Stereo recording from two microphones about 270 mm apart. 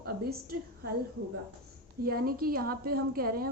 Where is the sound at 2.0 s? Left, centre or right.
Right.